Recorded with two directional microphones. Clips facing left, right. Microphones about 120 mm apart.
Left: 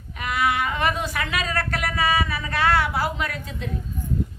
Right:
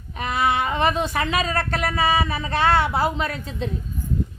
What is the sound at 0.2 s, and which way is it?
Speech, 30° right (ahead or behind).